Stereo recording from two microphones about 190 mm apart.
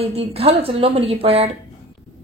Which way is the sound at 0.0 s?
30° right (ahead or behind).